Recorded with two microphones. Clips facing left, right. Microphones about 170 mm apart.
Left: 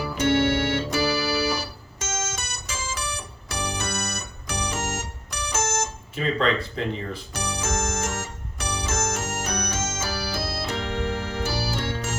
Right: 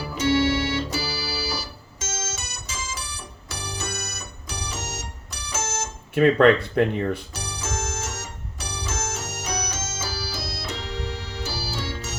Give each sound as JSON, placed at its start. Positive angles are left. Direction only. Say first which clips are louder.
{"t": 0.2, "sound": "organ", "louder": "even", "side_deg": 55}
{"t": 6.1, "sound": "speech", "louder": "right 8 dB", "side_deg": -60}
{"t": 7.3, "sound": "music", "louder": "left 4 dB", "side_deg": 60}